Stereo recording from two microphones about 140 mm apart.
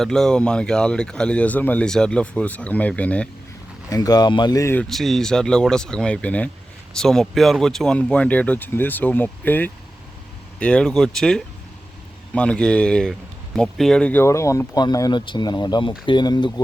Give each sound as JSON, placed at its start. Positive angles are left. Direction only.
{"t": 0.0, "sound": "speech", "side_deg": 5}
{"t": 3.8, "sound": "speech", "side_deg": 25}
{"t": 4.9, "sound": "speech", "side_deg": 0}